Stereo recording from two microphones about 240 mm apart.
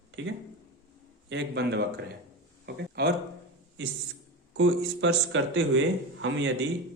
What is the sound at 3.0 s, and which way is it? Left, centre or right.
Speech, right.